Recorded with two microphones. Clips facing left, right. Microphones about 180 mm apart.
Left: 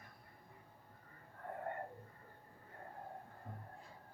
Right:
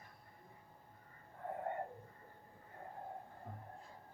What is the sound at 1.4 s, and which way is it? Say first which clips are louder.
Wheeze: right 3 dB; 20° right (ahead or behind).